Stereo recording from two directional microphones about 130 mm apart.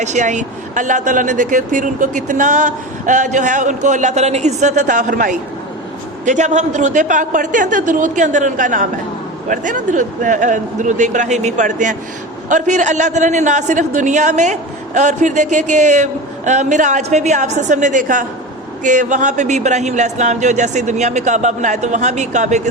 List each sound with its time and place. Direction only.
0.0 s speech: 65° right (ahead or behind); by 5.4 s 85° right
6.2 s speech: 65° right (ahead or behind)